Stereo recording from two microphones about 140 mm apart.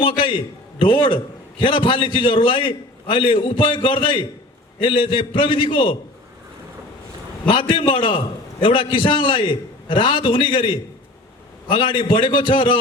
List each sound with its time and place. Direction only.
0.0 s a man's voice: 35° left (ahead or behind)
7.4 s a man's voice: 35° left (ahead or behind)